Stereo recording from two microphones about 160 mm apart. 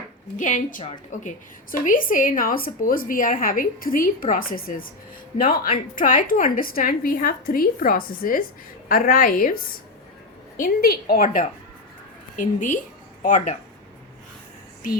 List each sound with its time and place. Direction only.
0.3 s a woman's voice: 50° left (ahead or behind)
6.0 s a woman's voice: 55° left (ahead or behind)
10.6 s a woman's voice: 70° left (ahead or behind); by 13.6 s 50° left (ahead or behind)